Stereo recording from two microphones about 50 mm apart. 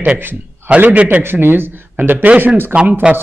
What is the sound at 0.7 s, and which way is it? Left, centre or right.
Speech, right.